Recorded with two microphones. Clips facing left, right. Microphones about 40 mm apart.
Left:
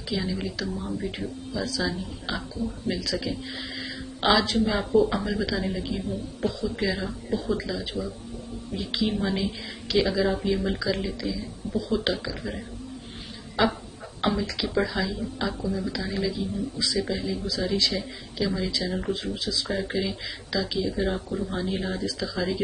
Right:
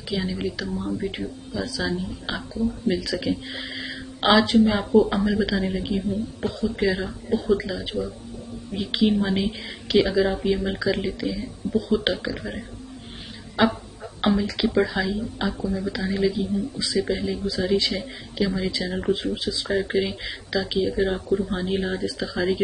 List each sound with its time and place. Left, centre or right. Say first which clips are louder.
0.0 s a woman's voice: right 2 dB; centre
14.2 s a woman's voice: right 4 dB; centre
15.0 s a woman's voice: right 4 dB; right
15.4 s a woman's voice: right 2 dB; centre; by 19.7 s right
19.7 s a woman's voice: right 7 dB; centre